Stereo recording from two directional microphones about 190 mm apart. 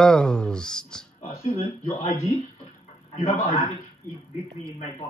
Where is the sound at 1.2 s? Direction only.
35° left (ahead or behind).